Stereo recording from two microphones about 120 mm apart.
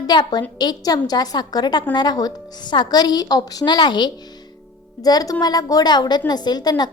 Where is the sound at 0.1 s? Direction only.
35° left (ahead or behind).